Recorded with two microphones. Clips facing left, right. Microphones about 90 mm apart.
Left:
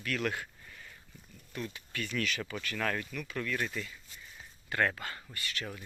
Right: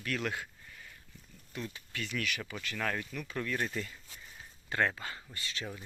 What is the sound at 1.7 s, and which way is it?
Speech, 20° right (ahead or behind).